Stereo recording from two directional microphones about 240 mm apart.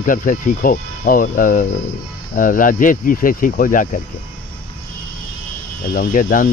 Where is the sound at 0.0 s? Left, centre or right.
Left.